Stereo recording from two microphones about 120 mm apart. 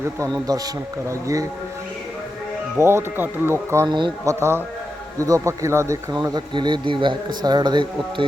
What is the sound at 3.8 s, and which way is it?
Speech, 40° right (ahead or behind).